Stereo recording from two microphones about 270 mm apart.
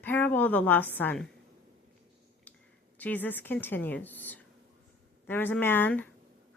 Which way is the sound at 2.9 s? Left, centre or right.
Centre.